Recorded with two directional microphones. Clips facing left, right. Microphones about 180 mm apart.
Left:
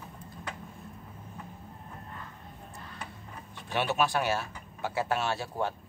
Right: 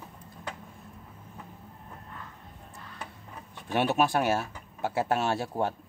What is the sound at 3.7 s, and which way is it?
A man's voice, 50° right (ahead or behind).